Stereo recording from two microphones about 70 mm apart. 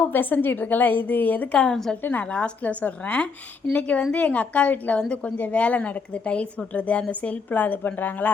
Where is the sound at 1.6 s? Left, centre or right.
Centre.